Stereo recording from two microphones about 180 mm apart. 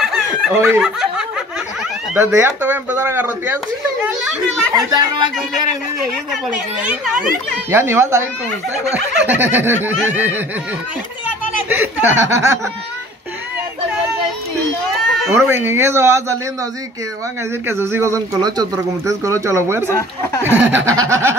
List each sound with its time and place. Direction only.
0.0 s snicker: centre (ahead or behind)
0.6 s a child's voice: 10° right (ahead or behind)
4.7 s speech: 25° right (ahead or behind)
6.3 s speech: 5° right (ahead or behind)
11.7 s speech: 10° right (ahead or behind)
15.3 s speech: 10° right (ahead or behind)
17.6 s speech: 15° right (ahead or behind)
19.9 s speech: 15° left (ahead or behind)
20.4 s speech: 10° right (ahead or behind)